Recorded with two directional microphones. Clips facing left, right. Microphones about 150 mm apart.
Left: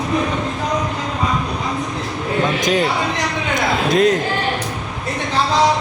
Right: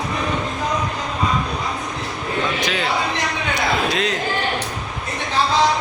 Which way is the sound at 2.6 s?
45° left (ahead or behind).